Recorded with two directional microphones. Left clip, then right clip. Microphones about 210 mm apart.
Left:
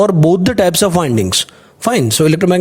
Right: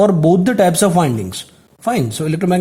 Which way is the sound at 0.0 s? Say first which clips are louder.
Left 1 dB; 40° left (ahead or behind).